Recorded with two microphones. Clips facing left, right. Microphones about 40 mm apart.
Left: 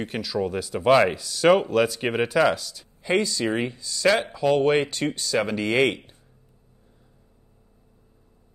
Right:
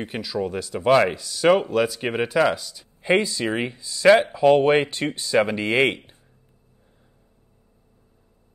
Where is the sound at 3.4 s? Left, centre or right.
Right.